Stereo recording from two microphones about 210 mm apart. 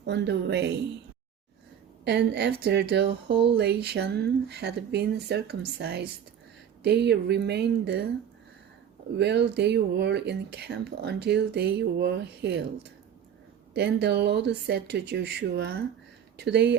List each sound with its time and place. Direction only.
0.0 s speech: 55° right (ahead or behind)
2.0 s speech: 55° right (ahead or behind)
9.1 s speech: 55° right (ahead or behind)
13.7 s speech: 50° right (ahead or behind)